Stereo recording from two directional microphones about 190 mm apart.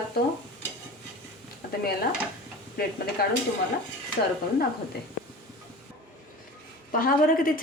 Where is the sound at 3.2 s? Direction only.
55° left (ahead or behind).